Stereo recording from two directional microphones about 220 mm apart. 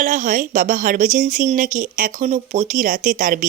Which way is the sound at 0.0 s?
35° right (ahead or behind).